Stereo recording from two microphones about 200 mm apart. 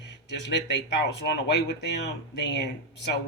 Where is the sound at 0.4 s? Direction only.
60° left (ahead or behind).